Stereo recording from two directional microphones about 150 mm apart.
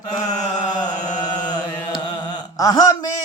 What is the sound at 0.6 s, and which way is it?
Chant, 30° left (ahead or behind).